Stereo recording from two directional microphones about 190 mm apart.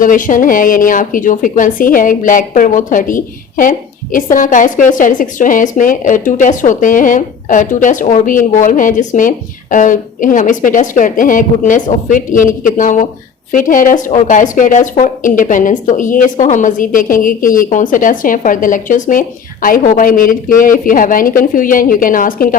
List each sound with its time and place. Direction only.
0.0 s a woman's voice: 45° left (ahead or behind)